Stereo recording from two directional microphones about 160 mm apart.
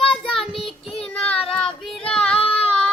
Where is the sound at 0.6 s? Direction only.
35° left (ahead or behind).